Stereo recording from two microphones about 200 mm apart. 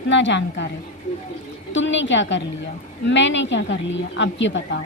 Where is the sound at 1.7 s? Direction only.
65° left (ahead or behind).